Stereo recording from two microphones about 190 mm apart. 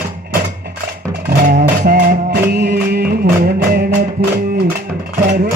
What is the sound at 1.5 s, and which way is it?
Music, 55° right (ahead or behind).